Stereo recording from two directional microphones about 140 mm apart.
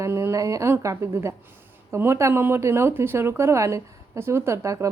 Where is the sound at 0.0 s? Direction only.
20° right (ahead or behind).